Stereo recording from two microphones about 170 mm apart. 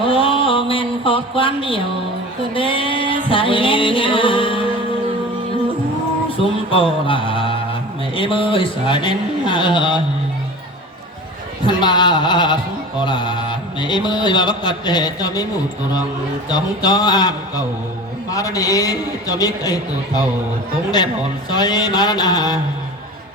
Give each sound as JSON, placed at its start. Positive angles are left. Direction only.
{"t": 0.0, "sound": "speech", "side_deg": 30}
{"t": 2.6, "sound": "music", "side_deg": 30}
{"t": 6.3, "sound": "mantra", "side_deg": 30}
{"t": 11.6, "sound": "speech", "side_deg": 25}
{"t": 16.5, "sound": "speech", "side_deg": 25}
{"t": 21.5, "sound": "speech", "side_deg": 25}